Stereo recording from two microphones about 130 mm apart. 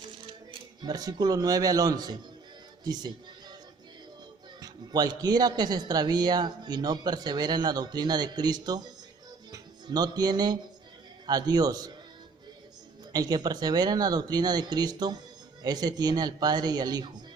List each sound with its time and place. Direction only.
0.8 s a man's voice: 30° right (ahead or behind)
4.6 s a man's voice: 30° right (ahead or behind)
13.1 s a man's voice: 30° right (ahead or behind)